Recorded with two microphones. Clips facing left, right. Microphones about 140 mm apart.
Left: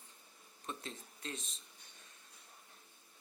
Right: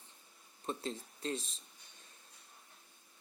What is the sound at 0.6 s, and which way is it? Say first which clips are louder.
Speech: right 6 dB; 35° right (ahead or behind).